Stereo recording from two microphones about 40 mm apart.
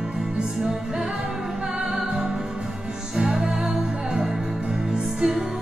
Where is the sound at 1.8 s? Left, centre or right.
Centre.